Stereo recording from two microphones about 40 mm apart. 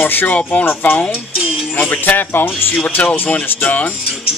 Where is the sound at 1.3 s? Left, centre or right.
Centre.